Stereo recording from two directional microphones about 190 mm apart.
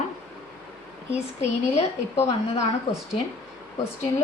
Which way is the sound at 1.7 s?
35° left (ahead or behind).